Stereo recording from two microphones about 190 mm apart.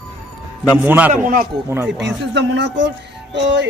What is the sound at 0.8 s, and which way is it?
Speech, 10° right (ahead or behind).